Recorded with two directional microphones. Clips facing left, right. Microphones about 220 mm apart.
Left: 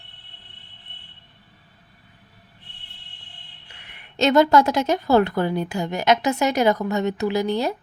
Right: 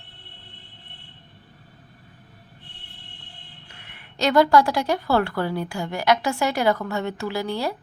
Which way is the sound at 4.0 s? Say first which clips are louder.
Left 2 dB; 25° left (ahead or behind).